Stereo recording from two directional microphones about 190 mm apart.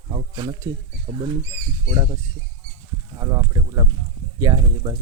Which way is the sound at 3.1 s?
20° right (ahead or behind).